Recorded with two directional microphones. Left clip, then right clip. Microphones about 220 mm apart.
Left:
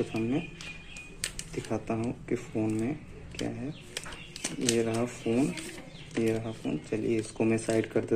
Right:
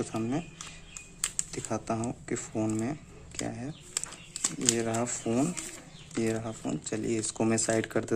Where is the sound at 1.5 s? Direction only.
25° right (ahead or behind).